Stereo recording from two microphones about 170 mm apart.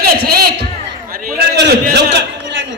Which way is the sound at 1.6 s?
85° right.